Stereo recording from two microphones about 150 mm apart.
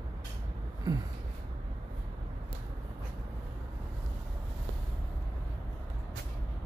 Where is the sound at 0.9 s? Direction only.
25° right (ahead or behind).